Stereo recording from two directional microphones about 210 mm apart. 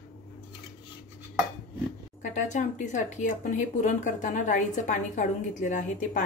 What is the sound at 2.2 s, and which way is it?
Speech, 35° left (ahead or behind).